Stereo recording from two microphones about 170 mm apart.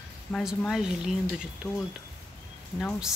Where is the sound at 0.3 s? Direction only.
Centre (ahead or behind).